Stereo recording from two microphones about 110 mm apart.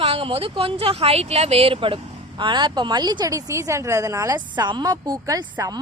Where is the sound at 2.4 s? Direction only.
45° right (ahead or behind); by 4.4 s 30° right (ahead or behind).